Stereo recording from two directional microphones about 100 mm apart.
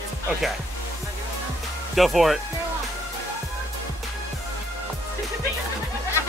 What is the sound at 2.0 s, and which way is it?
Speech, centre (ahead or behind).